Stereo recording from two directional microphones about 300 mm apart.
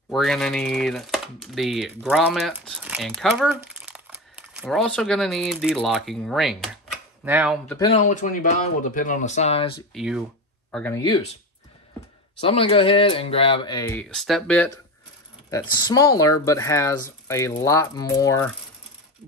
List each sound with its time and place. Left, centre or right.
0.1 s speech: centre
7.9 s speech: left
9.9 s speech: centre
12.4 s speech: centre
15.5 s speech: centre